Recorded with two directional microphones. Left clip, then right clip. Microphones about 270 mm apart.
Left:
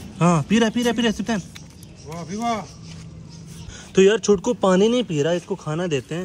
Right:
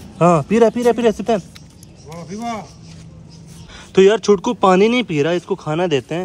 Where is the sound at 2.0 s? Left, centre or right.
Centre.